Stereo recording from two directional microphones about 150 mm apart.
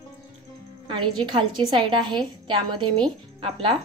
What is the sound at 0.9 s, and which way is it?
Speech, 30° right (ahead or behind).